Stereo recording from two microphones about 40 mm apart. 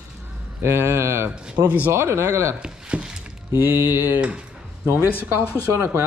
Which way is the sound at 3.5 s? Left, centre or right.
Right.